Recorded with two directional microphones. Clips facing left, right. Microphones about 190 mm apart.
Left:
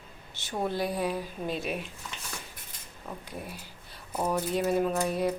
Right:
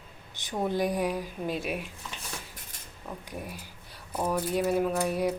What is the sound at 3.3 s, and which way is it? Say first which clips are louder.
Speech: right 1 dB; 15° right (ahead or behind).